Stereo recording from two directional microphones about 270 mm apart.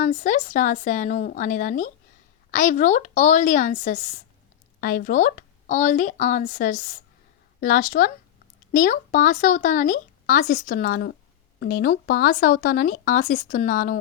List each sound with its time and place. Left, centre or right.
0.0 s speech: left